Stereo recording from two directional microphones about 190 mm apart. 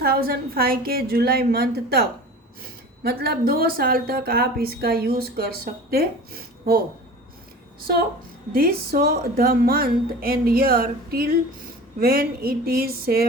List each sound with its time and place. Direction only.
0.0 s speech: 55° right (ahead or behind)
8.5 s speech: 50° right (ahead or behind)